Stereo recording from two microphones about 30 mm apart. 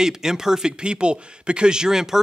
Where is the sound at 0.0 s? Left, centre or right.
Centre.